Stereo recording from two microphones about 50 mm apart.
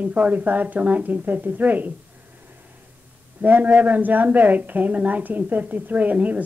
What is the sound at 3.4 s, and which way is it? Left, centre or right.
A woman's voice, right.